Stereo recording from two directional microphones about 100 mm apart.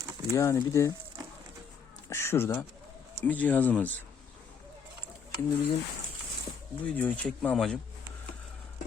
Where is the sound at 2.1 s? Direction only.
25° left (ahead or behind).